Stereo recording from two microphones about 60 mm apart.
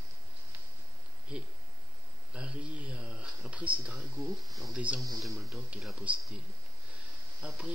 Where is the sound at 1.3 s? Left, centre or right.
Centre.